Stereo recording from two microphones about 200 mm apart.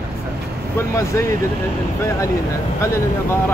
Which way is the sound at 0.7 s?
15° left (ahead or behind).